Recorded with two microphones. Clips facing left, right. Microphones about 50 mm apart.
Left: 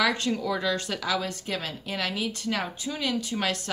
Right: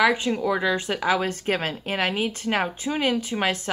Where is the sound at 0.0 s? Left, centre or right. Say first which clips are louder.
Right 5 dB; centre.